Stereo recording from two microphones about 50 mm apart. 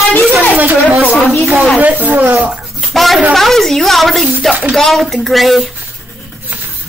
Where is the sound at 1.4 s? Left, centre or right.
Right.